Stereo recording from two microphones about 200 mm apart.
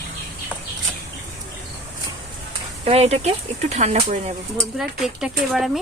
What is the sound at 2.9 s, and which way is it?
Speech, 30° right (ahead or behind).